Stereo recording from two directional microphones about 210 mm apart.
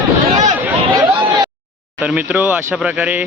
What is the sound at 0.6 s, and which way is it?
Chatter, 15° right (ahead or behind).